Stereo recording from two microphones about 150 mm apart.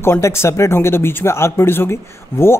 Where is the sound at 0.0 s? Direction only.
15° left (ahead or behind).